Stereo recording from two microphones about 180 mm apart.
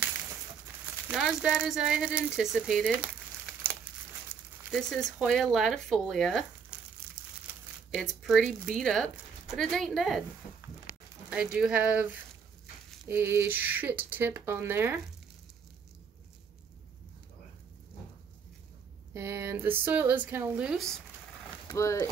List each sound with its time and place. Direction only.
1.0 s speech: 5° right (ahead or behind)
4.6 s speech: centre (ahead or behind)
7.9 s speech: centre (ahead or behind)
11.2 s speech: 5° right (ahead or behind)
19.1 s speech: 15° right (ahead or behind)
21.6 s speech: 20° left (ahead or behind)